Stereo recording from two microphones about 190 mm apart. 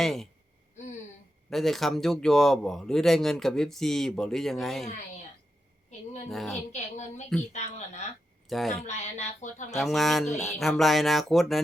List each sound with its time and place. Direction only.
0.0 s a man's voice: centre (ahead or behind)
1.5 s a man's voice: centre (ahead or behind)
6.2 s a man's voice: centre (ahead or behind)
6.7 s speech: 35° left (ahead or behind)
8.4 s a man's voice: centre (ahead or behind)
8.9 s speech: 40° left (ahead or behind)
9.7 s a man's voice: centre (ahead or behind)